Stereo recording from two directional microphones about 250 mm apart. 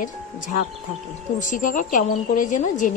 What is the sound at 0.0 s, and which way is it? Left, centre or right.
A woman's voice, left.